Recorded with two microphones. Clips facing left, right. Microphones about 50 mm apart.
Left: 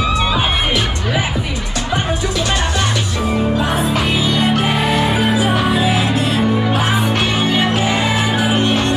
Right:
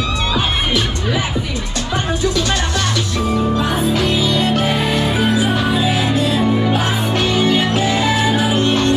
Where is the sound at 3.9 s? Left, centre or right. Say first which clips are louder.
Even; left.